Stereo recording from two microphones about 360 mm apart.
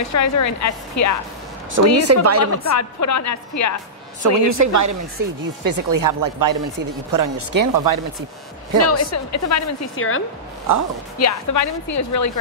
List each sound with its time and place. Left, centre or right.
0.1 s a woman's voice: left
1.7 s speech: right
2.7 s a woman's voice: left
4.2 s speech: right
8.8 s a woman's voice: left
11.1 s a woman's voice: left